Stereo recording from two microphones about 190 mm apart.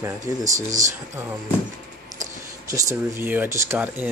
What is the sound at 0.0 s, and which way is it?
Speech, 15° right (ahead or behind).